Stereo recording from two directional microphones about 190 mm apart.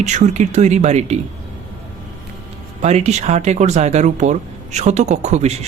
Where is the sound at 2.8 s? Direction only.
35° right (ahead or behind).